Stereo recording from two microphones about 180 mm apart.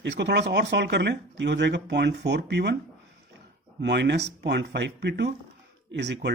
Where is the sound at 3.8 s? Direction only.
75° right (ahead or behind).